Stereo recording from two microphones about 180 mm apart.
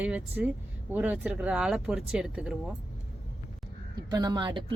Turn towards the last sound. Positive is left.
turn(degrees=-25)  # may be behind; listen again after turning